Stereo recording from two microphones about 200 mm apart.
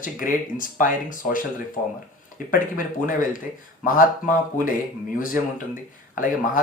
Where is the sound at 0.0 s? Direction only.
40° left (ahead or behind).